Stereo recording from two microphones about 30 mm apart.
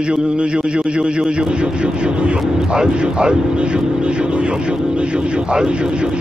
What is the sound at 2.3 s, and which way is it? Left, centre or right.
Music, right.